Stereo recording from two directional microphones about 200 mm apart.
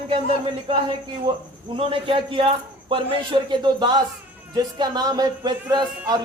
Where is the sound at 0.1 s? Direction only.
25° right (ahead or behind).